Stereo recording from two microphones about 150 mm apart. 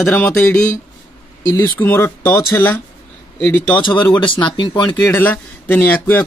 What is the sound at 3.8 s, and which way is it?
Speech, 30° left (ahead or behind).